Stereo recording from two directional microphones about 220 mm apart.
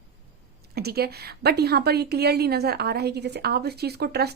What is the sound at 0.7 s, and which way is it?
A woman's voice, 45° right (ahead or behind).